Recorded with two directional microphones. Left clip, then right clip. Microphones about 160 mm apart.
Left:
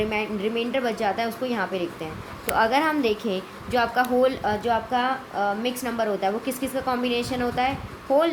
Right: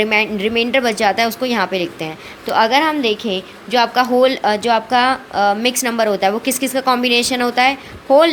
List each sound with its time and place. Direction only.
0.0 s a woman's voice: 45° right (ahead or behind)
2.5 s a woman's voice: 30° right (ahead or behind)